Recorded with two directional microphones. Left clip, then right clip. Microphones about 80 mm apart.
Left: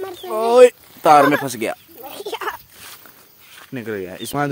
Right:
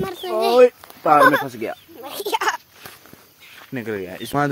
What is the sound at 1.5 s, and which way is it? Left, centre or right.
Speech, left.